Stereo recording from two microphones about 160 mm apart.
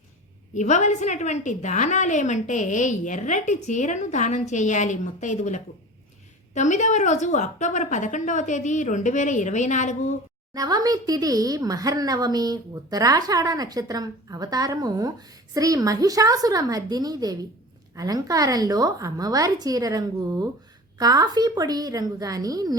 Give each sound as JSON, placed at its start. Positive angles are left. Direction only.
{"t": 0.5, "sound": "a woman's voice", "side_deg": 50}
{"t": 10.5, "sound": "speech", "side_deg": -25}